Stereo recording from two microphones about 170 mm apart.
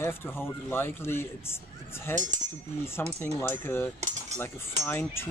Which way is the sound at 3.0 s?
10° left (ahead or behind).